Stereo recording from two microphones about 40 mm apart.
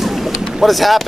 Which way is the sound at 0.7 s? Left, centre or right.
Centre.